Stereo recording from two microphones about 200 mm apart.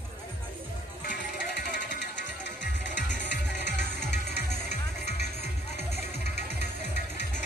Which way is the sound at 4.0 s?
55° left (ahead or behind).